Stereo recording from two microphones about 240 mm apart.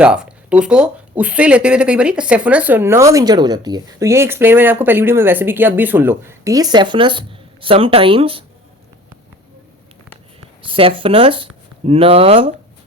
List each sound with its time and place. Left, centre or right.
0.0 s speech: centre; by 8.4 s right
10.6 s speech: right